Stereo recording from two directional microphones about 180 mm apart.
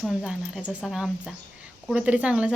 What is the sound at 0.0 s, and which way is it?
Speech, 5° right (ahead or behind).